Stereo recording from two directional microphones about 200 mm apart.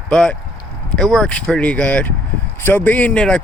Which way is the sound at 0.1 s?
5° left (ahead or behind).